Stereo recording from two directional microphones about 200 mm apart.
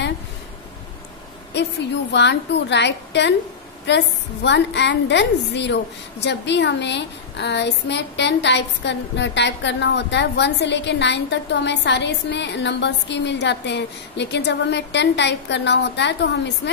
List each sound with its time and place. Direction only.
2.1 s a woman's voice: 60° left (ahead or behind)